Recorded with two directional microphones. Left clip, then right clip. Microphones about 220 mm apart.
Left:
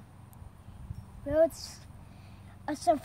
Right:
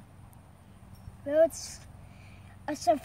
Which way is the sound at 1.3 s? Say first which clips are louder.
Right 2 dB; 10° right (ahead or behind).